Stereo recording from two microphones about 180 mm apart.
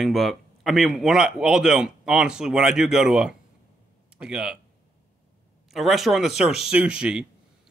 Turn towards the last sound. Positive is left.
turn(degrees=-5)  # may be behind; listen again after turning